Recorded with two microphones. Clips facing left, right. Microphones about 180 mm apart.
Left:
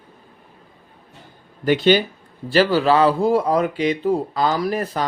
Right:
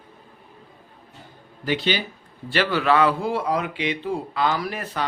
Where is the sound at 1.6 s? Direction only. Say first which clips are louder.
Left 8 dB; 50° left (ahead or behind).